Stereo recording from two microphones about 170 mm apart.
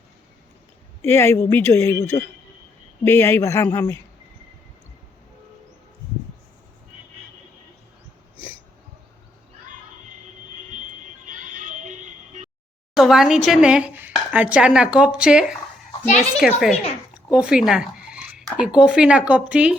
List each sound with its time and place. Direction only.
1.0 s speech: 15° left (ahead or behind)
3.0 s speech: 15° left (ahead or behind)
11.3 s neigh: 50° right (ahead or behind)
12.9 s speech: centre (ahead or behind)